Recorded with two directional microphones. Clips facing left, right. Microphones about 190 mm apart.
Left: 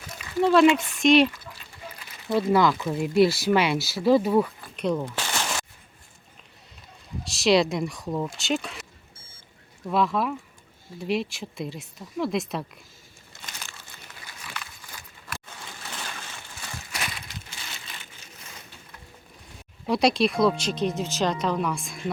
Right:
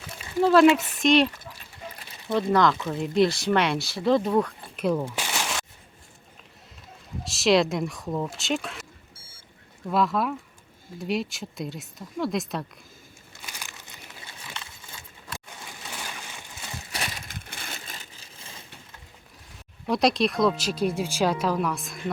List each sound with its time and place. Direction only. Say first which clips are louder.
0.4 s speech: right 1 dB; centre (ahead or behind)
2.3 s speech: left 1 dB; 5° left (ahead or behind)
4.8 s a sound: right 1 dB; 5° right (ahead or behind)
7.3 s speech: even; centre (ahead or behind)
9.8 s speech: even; centre (ahead or behind)
13.4 s crumpling: even; 15° right (ahead or behind)
15.4 s a sound: even; 15° right (ahead or behind)
16.9 s a sound: right 1 dB; 35° right (ahead or behind)
17.2 s crushing: right 2 dB; 55° right (ahead or behind); by 18.5 s 30° right (ahead or behind)
19.9 s speech: left 1 dB; centre (ahead or behind)